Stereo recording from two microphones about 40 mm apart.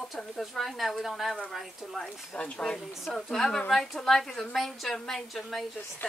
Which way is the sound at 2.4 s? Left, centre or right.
Left.